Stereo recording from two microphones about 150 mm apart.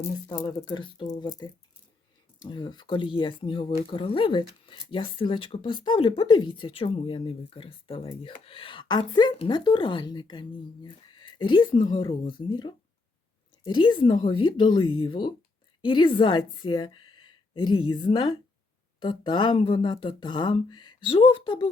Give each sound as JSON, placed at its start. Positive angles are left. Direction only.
{"t": 0.3, "sound": "speech", "side_deg": 25}
{"t": 2.4, "sound": "a woman's voice", "side_deg": 30}